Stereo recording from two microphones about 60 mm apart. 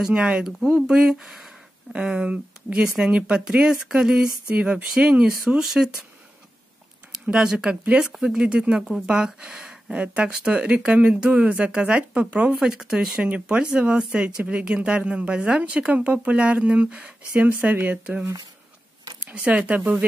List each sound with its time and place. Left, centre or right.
0.0 s speech: centre
0.6 s speech: centre
0.8 s speech: centre
5.2 s speech: centre
7.1 s a sound: centre
7.9 s speech: centre; by 18.2 s right
19.2 s speech: centre